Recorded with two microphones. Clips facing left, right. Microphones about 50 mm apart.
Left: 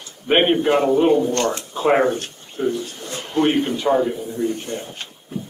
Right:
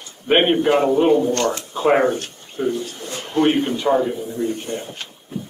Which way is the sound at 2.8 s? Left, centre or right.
Left.